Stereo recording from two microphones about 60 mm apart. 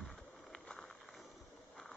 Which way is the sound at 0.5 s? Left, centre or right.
Centre.